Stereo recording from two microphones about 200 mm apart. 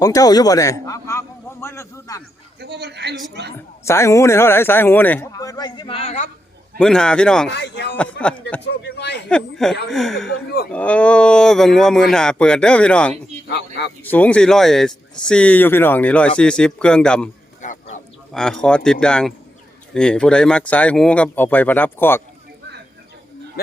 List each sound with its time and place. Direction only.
0.0 s a man's voice: 15° left (ahead or behind)
2.6 s a man's voice: 55° right (ahead or behind)
3.8 s speech: 15° left (ahead or behind); by 6.2 s 30° left (ahead or behind)
6.7 s speech: 5° left (ahead or behind)
7.4 s speech: 60° left (ahead or behind)
7.9 s speech: 5° left (ahead or behind)
8.6 s speech: 55° left (ahead or behind)
9.3 s speech: centre (ahead or behind)
10.2 s speech: 55° left (ahead or behind)
10.7 s speech: 5° left (ahead or behind)
17.6 s fowl: 40° left (ahead or behind)
18.3 s speech: 5° left (ahead or behind)